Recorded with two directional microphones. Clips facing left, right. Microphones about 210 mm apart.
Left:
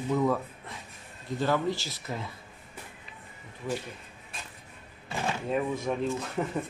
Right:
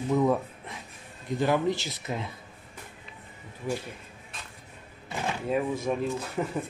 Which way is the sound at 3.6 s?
10° right (ahead or behind).